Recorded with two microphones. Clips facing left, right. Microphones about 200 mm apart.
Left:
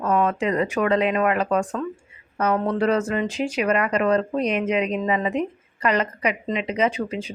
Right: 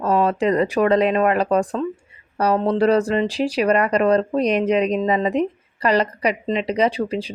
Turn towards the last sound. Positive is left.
turn(degrees=-35)  # may be behind; listen again after turning